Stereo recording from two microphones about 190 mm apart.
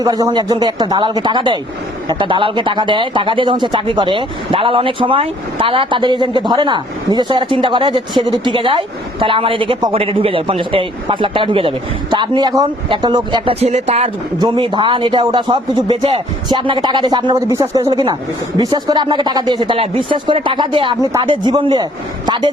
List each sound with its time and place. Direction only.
0.0 s a man's voice: 20° right (ahead or behind); by 14.1 s 35° right (ahead or behind)
14.3 s a man's voice: 20° right (ahead or behind)